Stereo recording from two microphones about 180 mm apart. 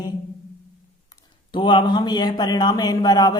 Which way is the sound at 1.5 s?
25° left (ahead or behind).